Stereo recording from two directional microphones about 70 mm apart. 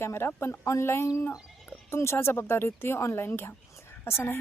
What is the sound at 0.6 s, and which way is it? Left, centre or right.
Speech, left.